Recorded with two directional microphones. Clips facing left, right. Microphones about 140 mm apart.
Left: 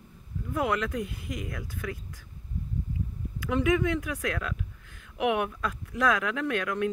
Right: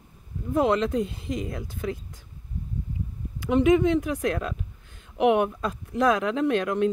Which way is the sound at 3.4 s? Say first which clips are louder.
Right 6 dB; 25° right (ahead or behind).